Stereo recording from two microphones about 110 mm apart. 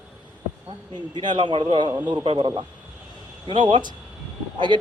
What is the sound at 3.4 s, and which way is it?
Speech, 50° right (ahead or behind).